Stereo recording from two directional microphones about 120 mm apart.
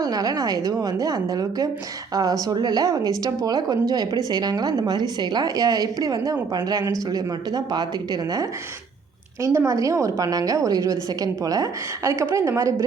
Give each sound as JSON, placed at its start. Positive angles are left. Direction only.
{"t": 0.0, "sound": "a woman's voice", "side_deg": -30}